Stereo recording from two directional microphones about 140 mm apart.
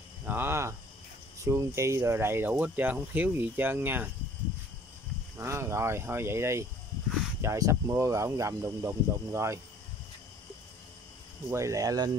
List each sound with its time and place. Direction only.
0.2 s cricket: 15° right (ahead or behind)
1.4 s speech: 20° right (ahead or behind)
5.4 s speech: 20° right (ahead or behind)
11.5 s speech: 20° right (ahead or behind)